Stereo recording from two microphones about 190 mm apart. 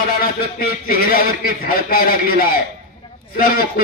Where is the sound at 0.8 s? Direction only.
50° left (ahead or behind).